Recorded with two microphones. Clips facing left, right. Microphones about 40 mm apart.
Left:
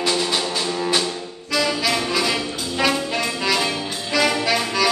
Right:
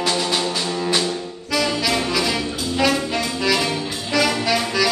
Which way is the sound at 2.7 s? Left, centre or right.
Centre.